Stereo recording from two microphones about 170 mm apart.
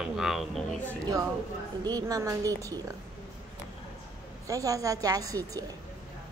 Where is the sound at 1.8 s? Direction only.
25° right (ahead or behind).